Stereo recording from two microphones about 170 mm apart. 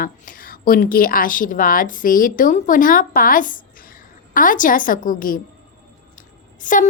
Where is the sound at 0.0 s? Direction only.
55° left (ahead or behind).